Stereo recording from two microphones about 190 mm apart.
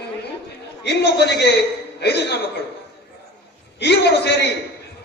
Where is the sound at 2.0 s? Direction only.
60° left (ahead or behind).